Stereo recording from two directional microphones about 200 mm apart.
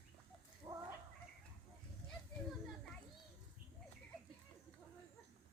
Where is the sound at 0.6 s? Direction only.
20° right (ahead or behind).